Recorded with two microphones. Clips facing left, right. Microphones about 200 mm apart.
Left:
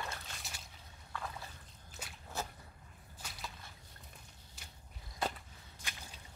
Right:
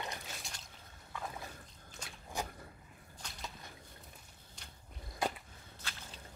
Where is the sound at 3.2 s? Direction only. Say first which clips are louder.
Even; 5° left (ahead or behind).